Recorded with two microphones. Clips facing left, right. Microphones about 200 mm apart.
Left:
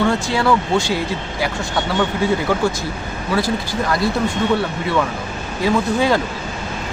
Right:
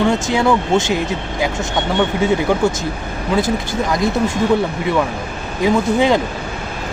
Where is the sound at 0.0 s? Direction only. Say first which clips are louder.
Right 2 dB; 20° right (ahead or behind).